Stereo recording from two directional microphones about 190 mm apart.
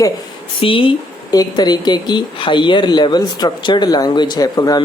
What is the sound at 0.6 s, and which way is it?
Speech, 30° left (ahead or behind).